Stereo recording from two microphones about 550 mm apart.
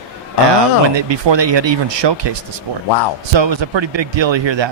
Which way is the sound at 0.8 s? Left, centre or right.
Right.